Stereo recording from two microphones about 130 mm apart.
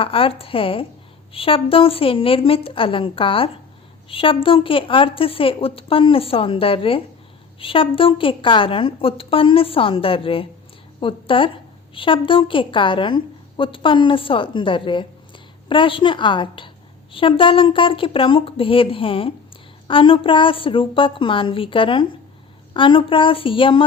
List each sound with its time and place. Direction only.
0.0 s a woman's voice: 45° left (ahead or behind)